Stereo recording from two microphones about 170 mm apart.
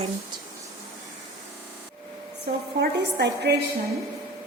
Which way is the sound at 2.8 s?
75° right (ahead or behind).